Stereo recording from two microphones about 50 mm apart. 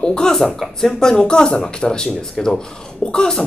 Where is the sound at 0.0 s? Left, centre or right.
Centre.